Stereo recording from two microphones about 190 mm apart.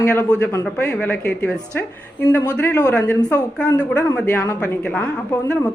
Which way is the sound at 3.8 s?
10° left (ahead or behind).